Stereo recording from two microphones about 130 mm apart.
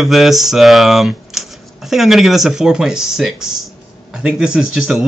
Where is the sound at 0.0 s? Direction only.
Centre (ahead or behind).